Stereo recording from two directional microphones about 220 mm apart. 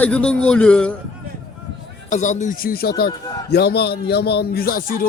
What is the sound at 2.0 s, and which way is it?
A man's voice, 35° left (ahead or behind).